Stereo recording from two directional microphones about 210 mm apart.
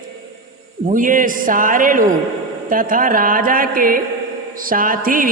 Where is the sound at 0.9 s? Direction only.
40° right (ahead or behind).